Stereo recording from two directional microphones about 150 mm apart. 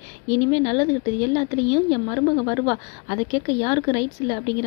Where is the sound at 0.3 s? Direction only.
25° left (ahead or behind).